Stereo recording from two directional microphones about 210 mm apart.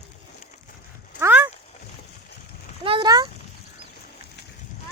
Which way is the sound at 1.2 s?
10° right (ahead or behind).